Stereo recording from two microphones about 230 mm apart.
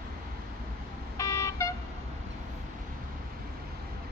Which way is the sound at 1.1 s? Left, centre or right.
Centre.